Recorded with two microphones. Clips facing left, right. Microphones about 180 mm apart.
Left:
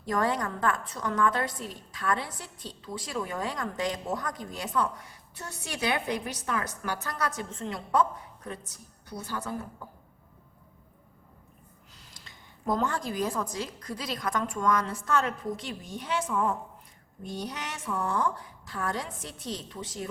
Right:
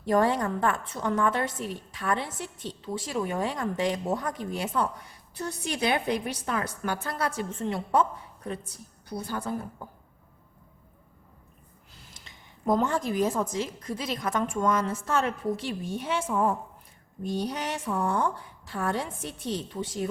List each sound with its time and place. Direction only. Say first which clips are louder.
0.0 s a woman's voice: right 4 dB; 30° right (ahead or behind)
12.1 s a woman's voice: even; 20° right (ahead or behind)